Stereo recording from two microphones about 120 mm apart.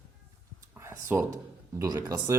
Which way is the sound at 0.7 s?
25° right (ahead or behind).